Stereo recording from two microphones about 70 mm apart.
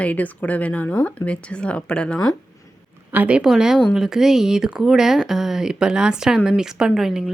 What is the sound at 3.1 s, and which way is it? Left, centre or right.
Speech, right.